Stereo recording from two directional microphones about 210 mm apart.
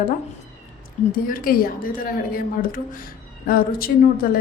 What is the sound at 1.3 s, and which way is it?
A woman's voice, 45° left (ahead or behind).